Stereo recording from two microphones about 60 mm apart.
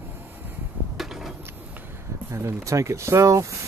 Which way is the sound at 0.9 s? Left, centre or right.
Centre.